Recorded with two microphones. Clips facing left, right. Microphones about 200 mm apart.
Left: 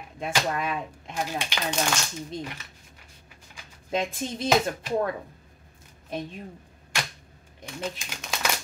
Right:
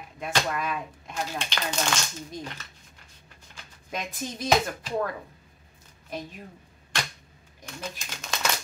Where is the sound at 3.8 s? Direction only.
25° left (ahead or behind).